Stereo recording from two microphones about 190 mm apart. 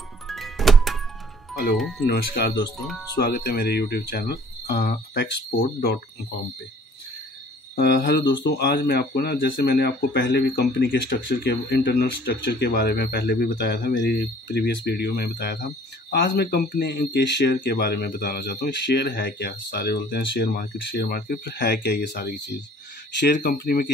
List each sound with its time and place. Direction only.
0.3 s music: centre (ahead or behind)
1.8 s speech: centre (ahead or behind)
2.0 s speech: 55° left (ahead or behind)
7.7 s speech: 60° left (ahead or behind)